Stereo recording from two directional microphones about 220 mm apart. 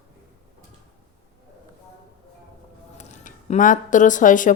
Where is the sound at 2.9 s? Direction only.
35° left (ahead or behind).